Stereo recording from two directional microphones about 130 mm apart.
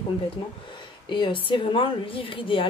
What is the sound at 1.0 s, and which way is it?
Speech, 40° left (ahead or behind).